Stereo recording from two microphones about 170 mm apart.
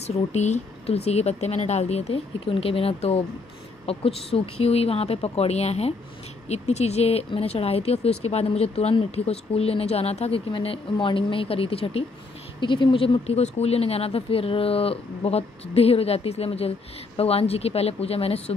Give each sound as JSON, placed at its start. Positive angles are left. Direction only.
{"t": 0.0, "sound": "speech", "side_deg": 40}